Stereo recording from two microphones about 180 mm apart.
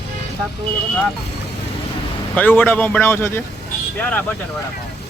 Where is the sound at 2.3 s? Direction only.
10° left (ahead or behind).